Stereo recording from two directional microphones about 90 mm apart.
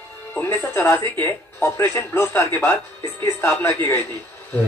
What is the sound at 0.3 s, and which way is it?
Speech, 20° left (ahead or behind).